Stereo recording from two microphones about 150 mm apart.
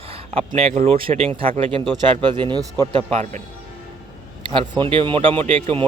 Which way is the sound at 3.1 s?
55° right (ahead or behind).